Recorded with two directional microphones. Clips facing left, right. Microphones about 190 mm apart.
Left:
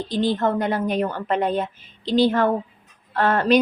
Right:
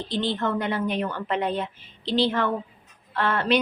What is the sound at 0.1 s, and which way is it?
A woman's voice, 40° left (ahead or behind).